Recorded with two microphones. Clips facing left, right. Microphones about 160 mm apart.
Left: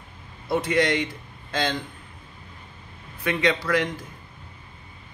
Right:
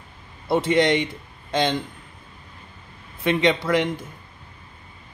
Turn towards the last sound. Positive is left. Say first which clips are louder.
# right 3 dB
turn(degrees=-20)  # may be behind; listen again after turning